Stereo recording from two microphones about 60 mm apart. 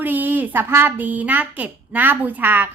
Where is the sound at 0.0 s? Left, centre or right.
Right.